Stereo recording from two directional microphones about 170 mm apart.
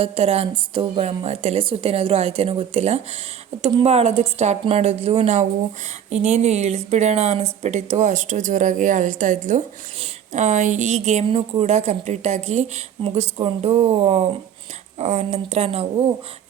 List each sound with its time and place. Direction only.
0.0 s speech: 35° right (ahead or behind)
3.6 s a woman's voice: 25° right (ahead or behind)
3.8 s speech: 35° right (ahead or behind)